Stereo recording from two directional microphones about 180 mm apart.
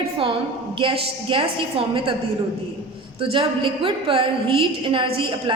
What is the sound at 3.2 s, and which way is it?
A woman's voice, 30° right (ahead or behind).